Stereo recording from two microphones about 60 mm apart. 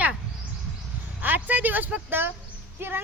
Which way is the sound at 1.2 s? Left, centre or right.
Right.